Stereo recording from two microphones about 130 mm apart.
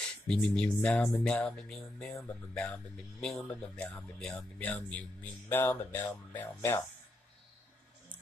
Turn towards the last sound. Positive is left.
turn(degrees=15)  # may be behind; listen again after turning